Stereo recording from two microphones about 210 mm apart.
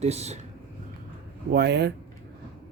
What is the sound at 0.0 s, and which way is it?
Speech, 30° right (ahead or behind).